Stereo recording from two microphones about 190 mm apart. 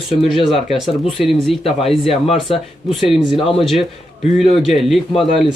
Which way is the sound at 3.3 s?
30° left (ahead or behind).